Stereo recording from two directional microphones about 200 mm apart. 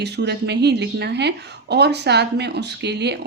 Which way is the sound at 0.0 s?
55° right (ahead or behind).